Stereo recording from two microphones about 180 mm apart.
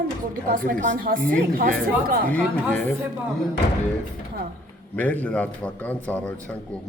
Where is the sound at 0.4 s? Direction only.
50° right (ahead or behind).